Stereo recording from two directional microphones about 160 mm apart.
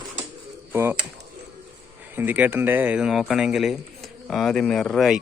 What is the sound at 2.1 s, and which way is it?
A man's voice, 10° right (ahead or behind).